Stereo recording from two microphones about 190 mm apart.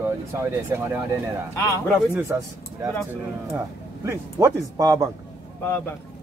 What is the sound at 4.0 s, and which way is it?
Speech, 15° right (ahead or behind).